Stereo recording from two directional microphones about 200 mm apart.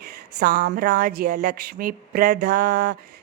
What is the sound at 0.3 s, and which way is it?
Mantra, 45° right (ahead or behind).